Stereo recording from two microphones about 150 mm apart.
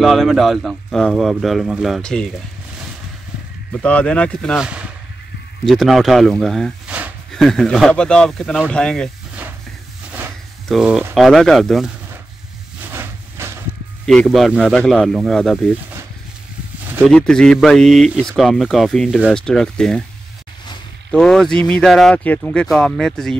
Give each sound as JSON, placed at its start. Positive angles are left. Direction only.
{"t": 0.0, "sound": "speech", "side_deg": 0}
{"t": 3.7, "sound": "speech", "side_deg": 10}
{"t": 5.7, "sound": "speech", "side_deg": 0}
{"t": 6.9, "sound": "a sound", "side_deg": -10}
{"t": 7.3, "sound": "speech", "side_deg": 5}
{"t": 10.7, "sound": "speech", "side_deg": -5}
{"t": 12.8, "sound": "hiss", "side_deg": -15}
{"t": 14.0, "sound": "speech", "side_deg": 0}
{"t": 17.1, "sound": "speech", "side_deg": 5}
{"t": 21.1, "sound": "speech", "side_deg": 5}